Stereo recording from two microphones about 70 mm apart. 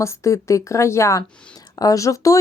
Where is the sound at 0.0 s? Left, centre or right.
Left.